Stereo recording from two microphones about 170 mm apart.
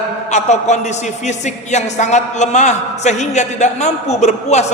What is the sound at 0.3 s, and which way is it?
A man's voice, 45° left (ahead or behind).